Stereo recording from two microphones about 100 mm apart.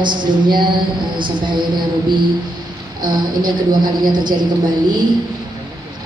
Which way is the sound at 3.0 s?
45° right (ahead or behind).